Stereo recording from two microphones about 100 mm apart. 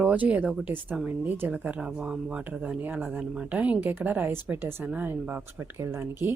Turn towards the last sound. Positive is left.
turn(degrees=-20)  # may be behind; listen again after turning